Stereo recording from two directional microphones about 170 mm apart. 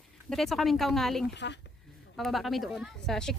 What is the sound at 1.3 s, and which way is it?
Speech, 90° left.